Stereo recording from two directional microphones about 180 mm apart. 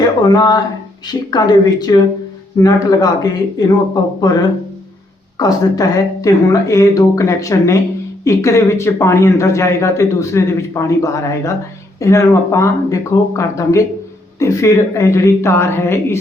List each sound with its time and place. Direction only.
0.0 s a man's voice: 20° left (ahead or behind)
5.4 s speech: 20° left (ahead or behind)